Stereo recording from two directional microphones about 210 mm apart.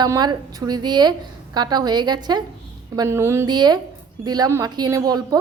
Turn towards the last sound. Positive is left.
turn(degrees=-20)  # may be behind; listen again after turning